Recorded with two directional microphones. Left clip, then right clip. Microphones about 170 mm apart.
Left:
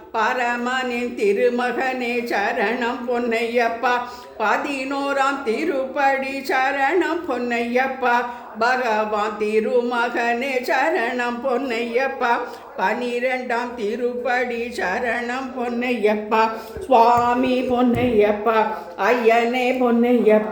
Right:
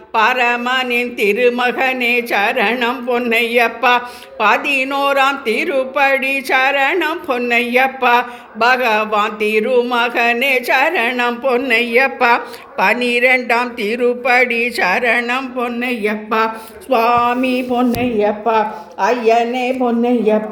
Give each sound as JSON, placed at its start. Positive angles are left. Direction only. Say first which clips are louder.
{"t": 0.1, "sound": "a man's voice", "louder": "right 7 dB", "side_deg": -15}